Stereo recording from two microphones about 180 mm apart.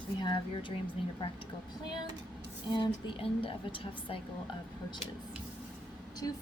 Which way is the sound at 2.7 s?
25° left (ahead or behind).